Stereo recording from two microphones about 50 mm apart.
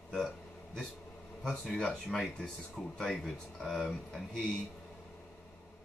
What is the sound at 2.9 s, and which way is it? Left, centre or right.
Speech, centre.